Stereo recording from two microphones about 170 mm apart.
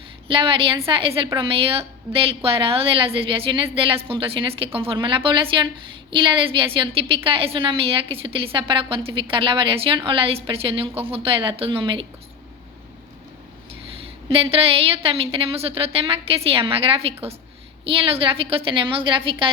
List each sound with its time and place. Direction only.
0.3 s a woman's voice: 30° right (ahead or behind)
14.3 s a woman's voice: 35° right (ahead or behind)